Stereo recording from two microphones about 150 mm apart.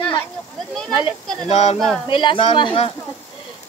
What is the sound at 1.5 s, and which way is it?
Speech, 45° left (ahead or behind).